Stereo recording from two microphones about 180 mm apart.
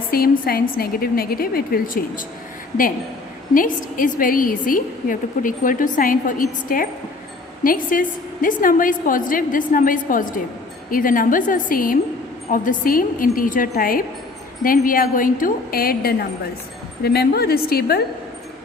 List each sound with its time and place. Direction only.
0.1 s a woman's voice: 55° left (ahead or behind)
3.5 s a woman's voice: 50° left (ahead or behind)